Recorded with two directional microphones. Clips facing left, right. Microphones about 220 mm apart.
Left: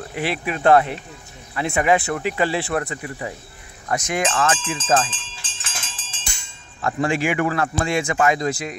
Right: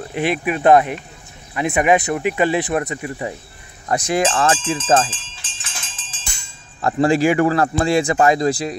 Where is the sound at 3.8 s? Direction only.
35° right (ahead or behind).